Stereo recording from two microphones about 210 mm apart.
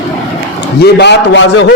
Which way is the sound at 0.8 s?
55° left (ahead or behind).